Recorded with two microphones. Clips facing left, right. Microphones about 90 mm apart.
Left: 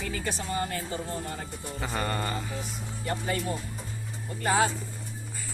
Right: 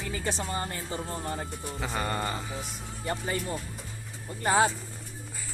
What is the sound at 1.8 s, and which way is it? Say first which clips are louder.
Music: even; 5° right (ahead or behind).